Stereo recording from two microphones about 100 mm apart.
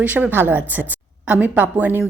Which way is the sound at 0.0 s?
15° right (ahead or behind).